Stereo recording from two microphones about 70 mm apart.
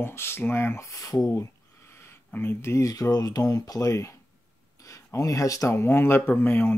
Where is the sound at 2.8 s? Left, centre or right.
Left.